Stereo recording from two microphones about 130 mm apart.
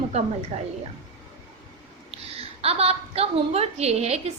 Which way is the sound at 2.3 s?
50° right (ahead or behind).